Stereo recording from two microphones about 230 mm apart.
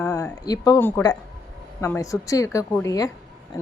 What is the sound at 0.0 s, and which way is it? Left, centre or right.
A woman's voice, centre.